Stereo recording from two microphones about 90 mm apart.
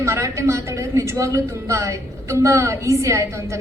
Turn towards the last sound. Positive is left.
turn(degrees=-35)  # may be behind; listen again after turning